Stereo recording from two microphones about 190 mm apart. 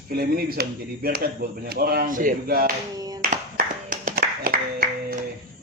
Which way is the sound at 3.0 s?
20° right (ahead or behind).